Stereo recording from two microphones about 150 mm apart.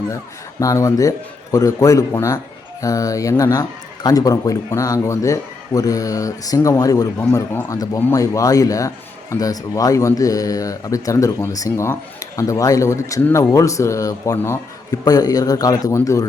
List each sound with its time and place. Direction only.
0.6 s speech: 20° left (ahead or behind)